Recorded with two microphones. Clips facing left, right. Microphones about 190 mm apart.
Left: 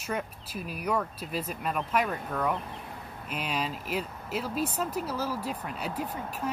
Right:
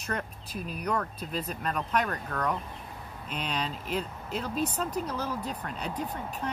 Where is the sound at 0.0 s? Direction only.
5° left (ahead or behind).